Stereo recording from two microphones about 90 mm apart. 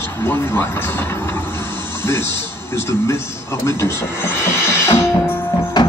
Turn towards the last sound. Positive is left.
turn(degrees=50)  # may be behind; listen again after turning